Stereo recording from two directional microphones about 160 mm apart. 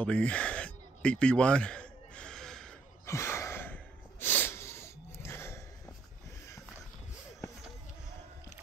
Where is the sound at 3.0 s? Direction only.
15° left (ahead or behind).